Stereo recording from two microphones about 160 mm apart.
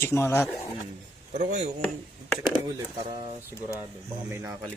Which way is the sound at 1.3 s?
50° right (ahead or behind).